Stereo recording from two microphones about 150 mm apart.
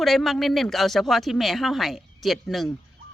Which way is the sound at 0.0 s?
Centre (ahead or behind).